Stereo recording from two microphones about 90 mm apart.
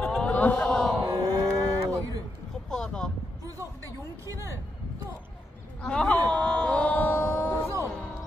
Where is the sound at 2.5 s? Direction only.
5° left (ahead or behind).